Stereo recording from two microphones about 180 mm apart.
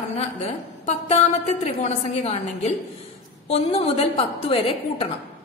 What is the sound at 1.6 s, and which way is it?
A woman's voice, 35° left (ahead or behind).